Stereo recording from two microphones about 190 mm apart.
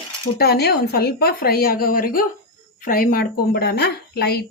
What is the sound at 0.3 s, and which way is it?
Speech, 55° left (ahead or behind).